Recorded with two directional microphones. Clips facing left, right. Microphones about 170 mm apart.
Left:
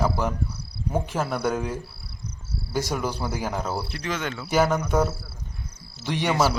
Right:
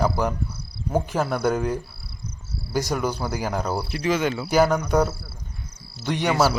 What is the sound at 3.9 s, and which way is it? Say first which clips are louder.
Speech: right 7 dB; 10° right (ahead or behind).